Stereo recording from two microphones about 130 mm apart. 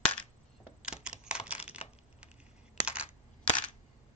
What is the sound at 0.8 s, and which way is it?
Camera, 5° right (ahead or behind).